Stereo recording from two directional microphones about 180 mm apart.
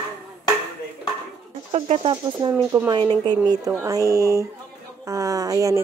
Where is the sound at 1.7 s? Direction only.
30° right (ahead or behind).